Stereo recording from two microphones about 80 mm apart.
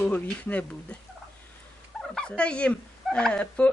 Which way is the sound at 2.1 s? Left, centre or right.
Centre.